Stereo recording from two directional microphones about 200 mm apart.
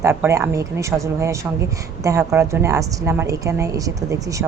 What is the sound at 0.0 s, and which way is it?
A woman's voice, 15° right (ahead or behind).